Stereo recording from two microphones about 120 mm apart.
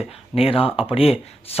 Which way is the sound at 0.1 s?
55° left (ahead or behind).